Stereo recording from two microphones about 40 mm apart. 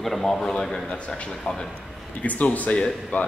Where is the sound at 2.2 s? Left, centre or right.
Left.